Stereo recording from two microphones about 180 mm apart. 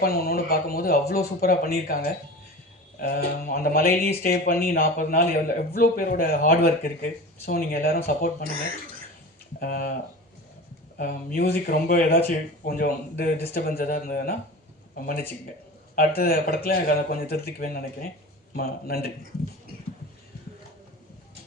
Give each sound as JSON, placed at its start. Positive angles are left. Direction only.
{"t": 0.0, "sound": "a man's voice", "side_deg": 55}
{"t": 3.0, "sound": "a man's voice", "side_deg": 55}
{"t": 9.6, "sound": "a man's voice", "side_deg": 55}